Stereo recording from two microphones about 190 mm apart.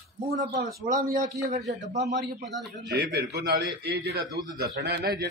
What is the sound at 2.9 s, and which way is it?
A man's voice, 55° right (ahead or behind).